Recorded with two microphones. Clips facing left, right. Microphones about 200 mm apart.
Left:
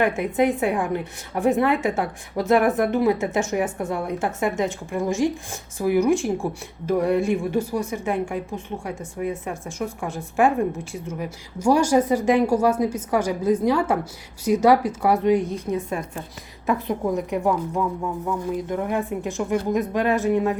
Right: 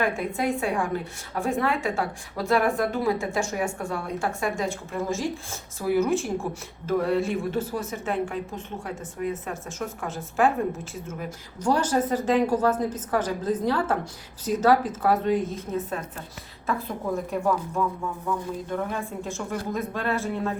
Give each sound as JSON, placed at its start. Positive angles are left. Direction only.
{"t": 0.0, "sound": "a woman's voice", "side_deg": 20}
{"t": 17.2, "sound": "speech", "side_deg": 15}